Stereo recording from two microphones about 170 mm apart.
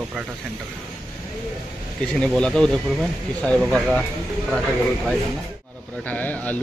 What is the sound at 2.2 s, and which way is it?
Speech, 5° left (ahead or behind).